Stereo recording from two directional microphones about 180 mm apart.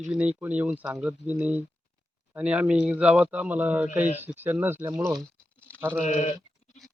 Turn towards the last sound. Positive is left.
turn(degrees=40)  # may be behind; listen again after turning